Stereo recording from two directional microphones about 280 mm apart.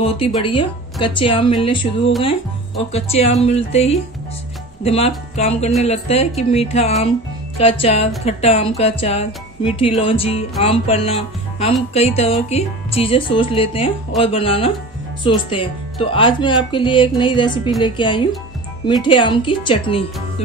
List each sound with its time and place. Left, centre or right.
0.0 s speech: centre
2.9 s speech: left